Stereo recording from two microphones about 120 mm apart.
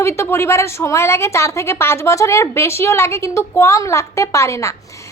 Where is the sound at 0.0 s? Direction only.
20° left (ahead or behind).